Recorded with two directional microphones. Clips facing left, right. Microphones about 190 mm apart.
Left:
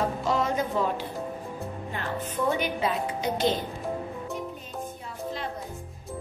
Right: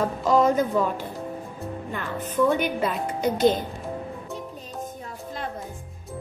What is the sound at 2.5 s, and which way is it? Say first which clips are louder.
A woman's voice: right 3 dB; 50° right (ahead or behind).